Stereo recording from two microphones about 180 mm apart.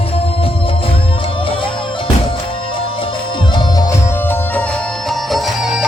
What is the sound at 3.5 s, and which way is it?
Music, 25° left (ahead or behind).